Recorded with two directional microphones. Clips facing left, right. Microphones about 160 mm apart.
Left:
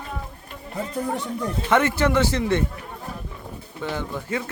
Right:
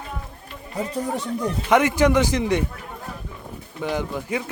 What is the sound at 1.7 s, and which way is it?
Speech, 15° right (ahead or behind).